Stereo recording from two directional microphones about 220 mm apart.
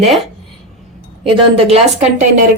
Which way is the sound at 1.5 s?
25° right (ahead or behind).